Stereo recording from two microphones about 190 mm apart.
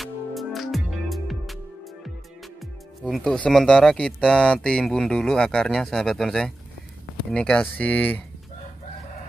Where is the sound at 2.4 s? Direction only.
Centre (ahead or behind).